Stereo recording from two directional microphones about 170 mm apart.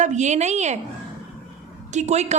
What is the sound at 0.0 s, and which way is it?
Speech, 45° right (ahead or behind).